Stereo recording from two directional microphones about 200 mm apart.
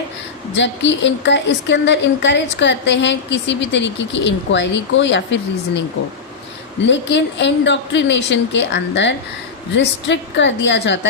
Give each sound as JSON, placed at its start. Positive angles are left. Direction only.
{"t": 0.5, "sound": "a woman's voice", "side_deg": 65}
{"t": 6.8, "sound": "a woman's voice", "side_deg": 65}